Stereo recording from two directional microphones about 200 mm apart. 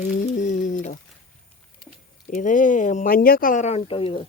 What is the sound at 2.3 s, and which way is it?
Speech, 40° left (ahead or behind).